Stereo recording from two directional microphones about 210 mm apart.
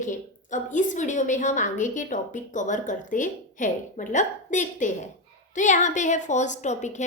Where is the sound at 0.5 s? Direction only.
35° left (ahead or behind).